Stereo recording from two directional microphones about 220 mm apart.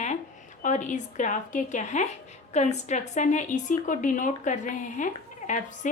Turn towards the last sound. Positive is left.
turn(degrees=35)  # may be behind; listen again after turning